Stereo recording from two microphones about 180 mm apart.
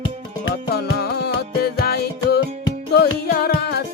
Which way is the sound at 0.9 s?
65° left (ahead or behind).